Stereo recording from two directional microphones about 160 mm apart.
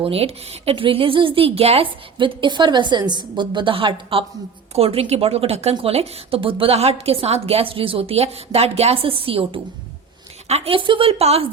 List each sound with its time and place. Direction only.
0.0 s a woman's voice: 40° right (ahead or behind)